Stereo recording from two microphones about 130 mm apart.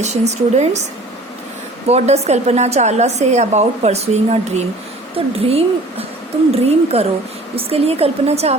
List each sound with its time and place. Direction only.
0.0 s a woman's voice: 60° right (ahead or behind)
1.9 s a woman's voice: 55° right (ahead or behind)